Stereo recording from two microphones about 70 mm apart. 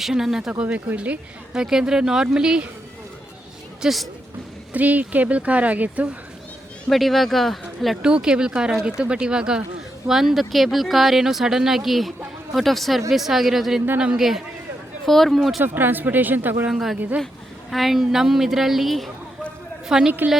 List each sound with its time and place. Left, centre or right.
0.0 s speech: centre
0.6 s speech: centre
3.8 s a woman's voice: centre
4.7 s speech: right
6.9 s speech: centre
8.0 s speech: centre
15.6 s speech: right
16.6 s speech: centre